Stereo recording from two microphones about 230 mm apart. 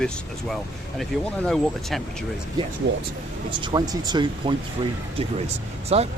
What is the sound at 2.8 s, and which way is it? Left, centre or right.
Speech, right.